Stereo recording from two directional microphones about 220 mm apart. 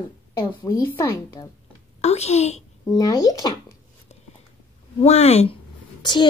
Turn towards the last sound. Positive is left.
turn(degrees=20)  # may be behind; listen again after turning